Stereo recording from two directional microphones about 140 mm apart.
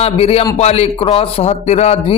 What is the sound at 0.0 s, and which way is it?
A man's voice, 45° left (ahead or behind).